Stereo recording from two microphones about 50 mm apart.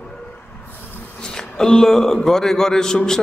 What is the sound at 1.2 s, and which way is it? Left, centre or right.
A man's voice, centre.